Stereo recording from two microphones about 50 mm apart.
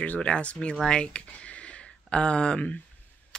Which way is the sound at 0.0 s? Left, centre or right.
Left.